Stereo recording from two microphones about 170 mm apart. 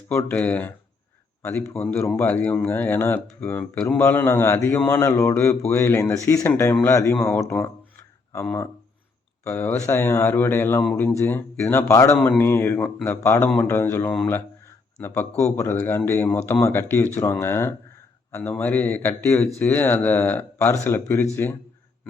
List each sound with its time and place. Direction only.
0.1 s a man's voice: 10° left (ahead or behind)
7.2 s speech: 5° left (ahead or behind)
8.3 s a man's voice: 20° left (ahead or behind)